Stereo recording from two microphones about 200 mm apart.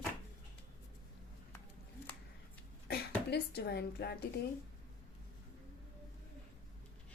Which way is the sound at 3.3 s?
55° left (ahead or behind).